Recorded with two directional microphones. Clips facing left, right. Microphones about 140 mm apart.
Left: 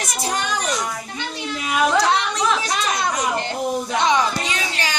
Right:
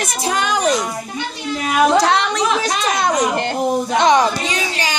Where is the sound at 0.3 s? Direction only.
90° right.